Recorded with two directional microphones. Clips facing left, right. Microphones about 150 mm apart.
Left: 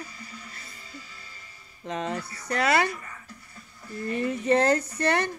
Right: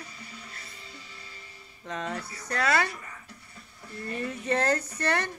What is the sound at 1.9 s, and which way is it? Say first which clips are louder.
Speech: left 4 dB; 30° left (ahead or behind).